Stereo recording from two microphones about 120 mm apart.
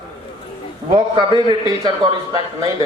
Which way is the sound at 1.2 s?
45° right (ahead or behind).